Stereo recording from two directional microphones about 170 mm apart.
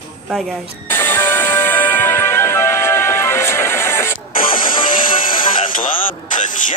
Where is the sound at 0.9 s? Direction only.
15° left (ahead or behind).